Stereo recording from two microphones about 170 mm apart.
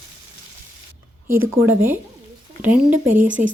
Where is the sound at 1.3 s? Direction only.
15° right (ahead or behind).